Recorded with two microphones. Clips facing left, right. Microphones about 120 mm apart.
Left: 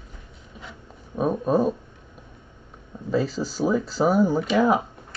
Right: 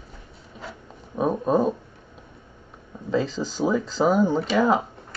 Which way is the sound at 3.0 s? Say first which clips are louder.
Even; 10° left (ahead or behind).